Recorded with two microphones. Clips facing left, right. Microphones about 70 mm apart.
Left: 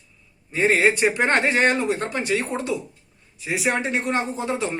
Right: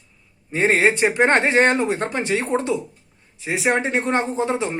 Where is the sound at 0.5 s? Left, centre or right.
Right.